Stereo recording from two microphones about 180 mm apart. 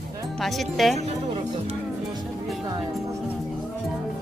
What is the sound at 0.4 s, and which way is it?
Speech, centre (ahead or behind).